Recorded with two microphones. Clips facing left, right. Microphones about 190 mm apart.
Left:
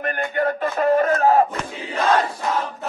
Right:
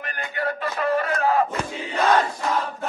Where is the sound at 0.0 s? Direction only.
50° left (ahead or behind).